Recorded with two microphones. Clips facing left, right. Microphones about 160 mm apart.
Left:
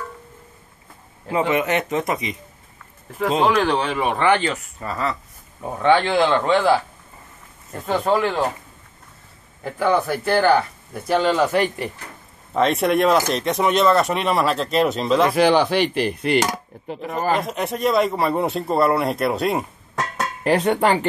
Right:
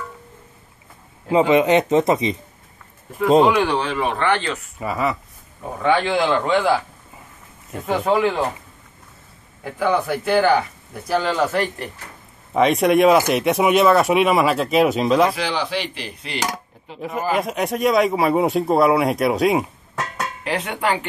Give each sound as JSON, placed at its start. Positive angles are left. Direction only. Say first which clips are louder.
{"t": 1.5, "sound": "speech", "louder": "right 7 dB", "side_deg": -20}
{"t": 3.4, "sound": "speech", "louder": "right 1 dB", "side_deg": -5}
{"t": 4.7, "sound": "speech", "louder": "right 3 dB", "side_deg": -10}
{"t": 7.7, "sound": "speech", "louder": "right 1 dB", "side_deg": -10}
{"t": 9.6, "sound": "speech", "louder": "left 1 dB", "side_deg": -5}
{"t": 12.5, "sound": "speech", "louder": "right 3 dB", "side_deg": -5}
{"t": 15.3, "sound": "chopping", "louder": "left 8 dB", "side_deg": 50}
{"t": 17.3, "sound": "speech", "louder": "right 1 dB", "side_deg": -5}
{"t": 20.4, "sound": "speech", "louder": "left 6 dB", "side_deg": 40}